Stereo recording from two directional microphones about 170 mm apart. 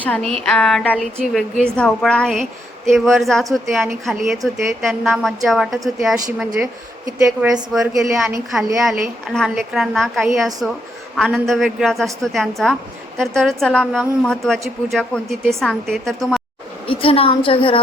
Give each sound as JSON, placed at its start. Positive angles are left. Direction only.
{"t": 0.0, "sound": "a woman's voice", "side_deg": 5}
{"t": 7.7, "sound": "a woman's voice", "side_deg": 0}
{"t": 16.8, "sound": "a woman's voice", "side_deg": 35}